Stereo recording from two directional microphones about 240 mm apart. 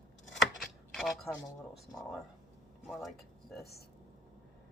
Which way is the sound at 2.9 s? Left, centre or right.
Centre.